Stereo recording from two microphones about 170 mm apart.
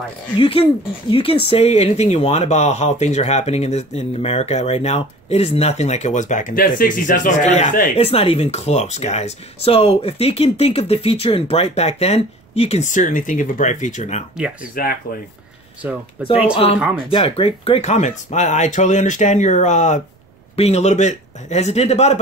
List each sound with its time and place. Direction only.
0.4 s speech: 35° left (ahead or behind)
14.3 s speech: 5° right (ahead or behind)
16.2 s speech: 5° right (ahead or behind)
17.1 s speech: 35° left (ahead or behind)